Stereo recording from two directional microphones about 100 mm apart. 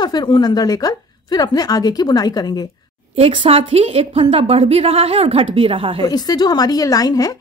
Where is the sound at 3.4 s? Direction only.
90° right; by 6.0 s 65° right (ahead or behind).